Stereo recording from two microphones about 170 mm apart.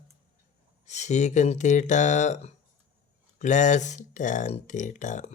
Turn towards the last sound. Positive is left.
turn(degrees=45)  # may be behind; listen again after turning